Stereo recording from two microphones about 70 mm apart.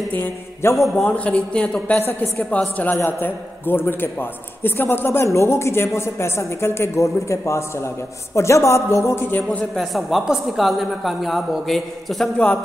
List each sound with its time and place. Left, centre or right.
0.1 s mantra: left
0.7 s a woman's voice: centre
1.0 s a man's voice: centre
2.0 s a man's voice: left
9.8 s a woman's voice: centre